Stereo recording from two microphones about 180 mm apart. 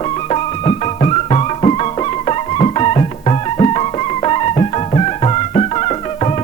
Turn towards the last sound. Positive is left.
turn(degrees=30)  # may be behind; listen again after turning